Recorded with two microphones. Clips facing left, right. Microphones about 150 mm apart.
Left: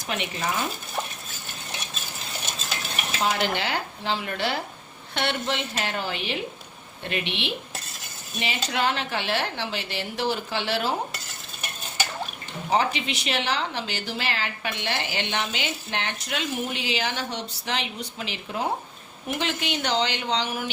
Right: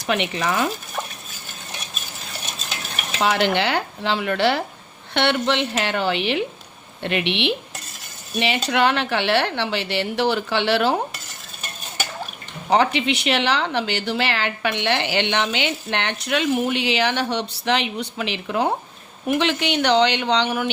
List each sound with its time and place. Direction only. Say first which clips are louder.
0.0 s speech: right 6 dB; 75° right (ahead or behind)
3.2 s speech: right 6 dB; 75° right (ahead or behind)
12.7 s speech: right 6 dB; 70° right (ahead or behind)